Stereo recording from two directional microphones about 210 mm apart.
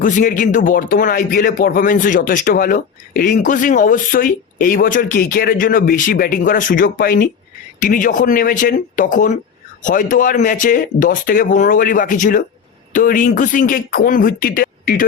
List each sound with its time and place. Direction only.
0.0 s speech: 40° left (ahead or behind)